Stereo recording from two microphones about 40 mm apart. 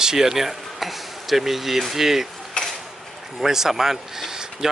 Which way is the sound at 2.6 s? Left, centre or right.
Left.